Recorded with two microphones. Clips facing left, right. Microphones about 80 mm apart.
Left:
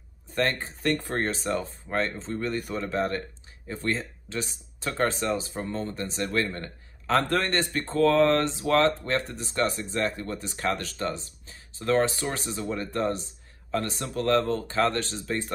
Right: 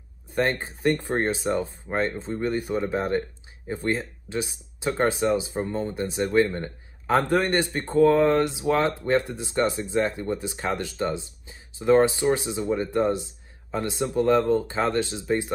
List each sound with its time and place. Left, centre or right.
0.3 s speech: centre